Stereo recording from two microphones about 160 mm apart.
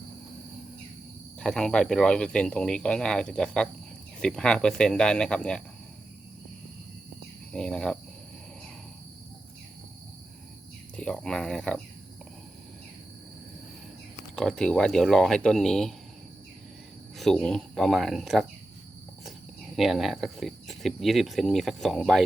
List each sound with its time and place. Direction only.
1.4 s speech: 5° left (ahead or behind)
7.5 s speech: 5° left (ahead or behind)
10.9 s speech: 5° left (ahead or behind)
14.3 s speech: 5° left (ahead or behind)
17.2 s speech: 5° left (ahead or behind)
19.7 s speech: centre (ahead or behind)